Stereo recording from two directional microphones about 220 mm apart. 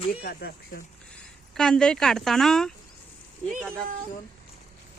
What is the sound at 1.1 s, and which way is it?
Speech, 5° left (ahead or behind).